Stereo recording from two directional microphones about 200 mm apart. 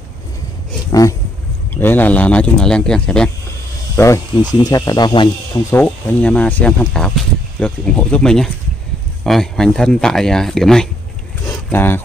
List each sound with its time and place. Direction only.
1.7 s speech: 10° left (ahead or behind)
3.9 s speech: 15° left (ahead or behind)
5.7 s speech: 10° left (ahead or behind)
11.4 s a sound: 10° left (ahead or behind)